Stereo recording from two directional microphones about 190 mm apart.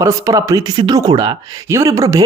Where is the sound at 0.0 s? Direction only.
20° right (ahead or behind).